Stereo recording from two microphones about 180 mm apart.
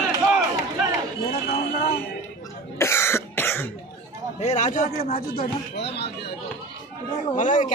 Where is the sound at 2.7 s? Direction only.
15° left (ahead or behind).